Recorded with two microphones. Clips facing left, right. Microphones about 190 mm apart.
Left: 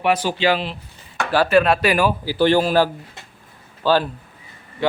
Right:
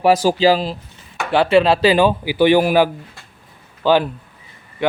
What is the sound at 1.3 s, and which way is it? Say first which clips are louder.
Speech: right 2 dB; 25° right (ahead or behind).